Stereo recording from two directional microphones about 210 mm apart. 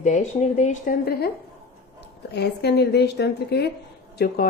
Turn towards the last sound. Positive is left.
turn(degrees=50)  # may be behind; listen again after turning